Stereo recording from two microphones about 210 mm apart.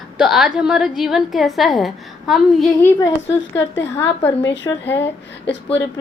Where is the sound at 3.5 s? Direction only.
60° left (ahead or behind).